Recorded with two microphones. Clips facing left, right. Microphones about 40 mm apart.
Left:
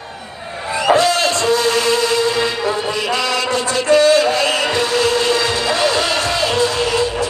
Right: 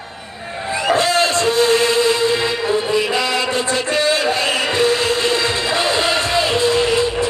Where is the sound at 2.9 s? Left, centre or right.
Right.